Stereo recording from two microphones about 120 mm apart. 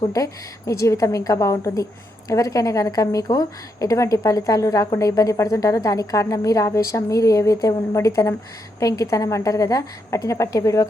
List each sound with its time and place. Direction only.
0.7 s a woman's voice: 25° left (ahead or behind)